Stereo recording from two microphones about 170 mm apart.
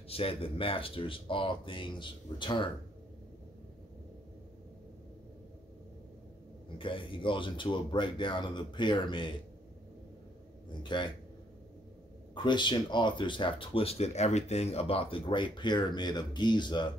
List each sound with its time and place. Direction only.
0.1 s speech: 35° left (ahead or behind)
6.8 s speech: 30° left (ahead or behind)
10.7 s speech: 30° left (ahead or behind)
12.4 s speech: 25° left (ahead or behind)